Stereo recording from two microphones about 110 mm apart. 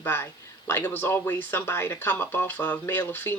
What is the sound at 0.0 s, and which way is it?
Speech, 20° left (ahead or behind).